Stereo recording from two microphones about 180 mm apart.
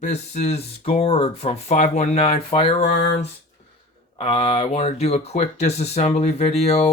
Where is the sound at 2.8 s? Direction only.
65° left (ahead or behind).